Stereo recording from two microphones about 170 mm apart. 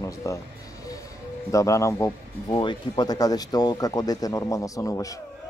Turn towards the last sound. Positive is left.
turn(degrees=20)  # may be behind; listen again after turning